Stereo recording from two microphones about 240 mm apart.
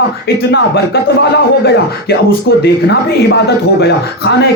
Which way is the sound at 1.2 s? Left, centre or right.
Left.